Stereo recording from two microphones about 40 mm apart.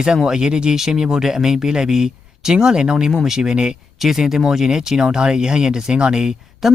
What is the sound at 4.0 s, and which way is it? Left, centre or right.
Speech, centre.